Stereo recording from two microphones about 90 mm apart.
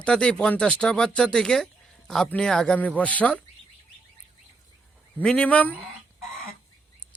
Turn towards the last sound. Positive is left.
turn(degrees=15)  # may be behind; listen again after turning